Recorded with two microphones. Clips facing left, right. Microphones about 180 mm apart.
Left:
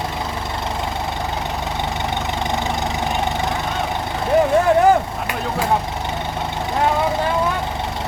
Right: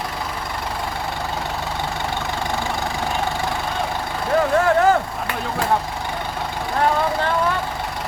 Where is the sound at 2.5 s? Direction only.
20° left (ahead or behind).